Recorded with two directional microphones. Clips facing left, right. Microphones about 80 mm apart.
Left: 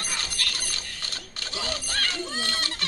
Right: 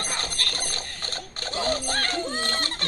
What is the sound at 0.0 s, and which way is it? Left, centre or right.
Mechanisms, right.